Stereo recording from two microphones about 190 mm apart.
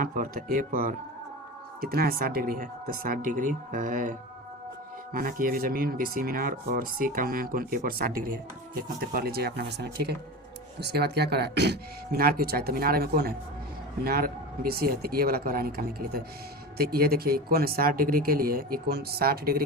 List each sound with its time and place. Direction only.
0.0 s speech: 45° right (ahead or behind)
5.1 s speech: 50° right (ahead or behind)